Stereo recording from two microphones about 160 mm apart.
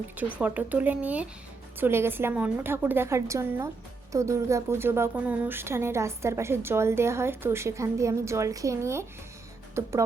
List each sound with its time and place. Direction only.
0.2 s a woman's voice: 10° right (ahead or behind)